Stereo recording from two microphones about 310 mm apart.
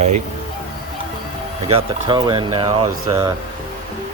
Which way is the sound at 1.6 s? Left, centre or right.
Centre.